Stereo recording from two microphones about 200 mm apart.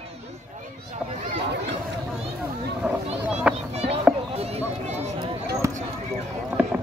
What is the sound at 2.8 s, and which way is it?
Speech, 5° right (ahead or behind).